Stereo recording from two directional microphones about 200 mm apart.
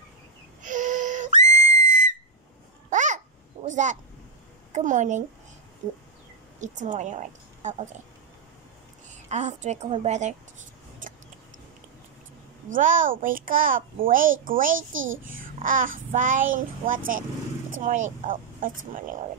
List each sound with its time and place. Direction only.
0.6 s whistle: 40° right (ahead or behind)
2.9 s babbling: 40° right (ahead or behind)
3.6 s a woman's voice: 35° right (ahead or behind)
9.3 s a woman's voice: 35° right (ahead or behind)
12.7 s a child's voice: 40° right (ahead or behind)
14.9 s a child's voice: 75° right (ahead or behind)
15.2 s speech: 45° right (ahead or behind)